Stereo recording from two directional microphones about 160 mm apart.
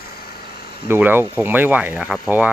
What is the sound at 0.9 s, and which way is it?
Speech, 10° right (ahead or behind).